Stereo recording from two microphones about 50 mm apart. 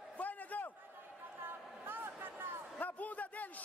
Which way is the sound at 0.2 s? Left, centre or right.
Left.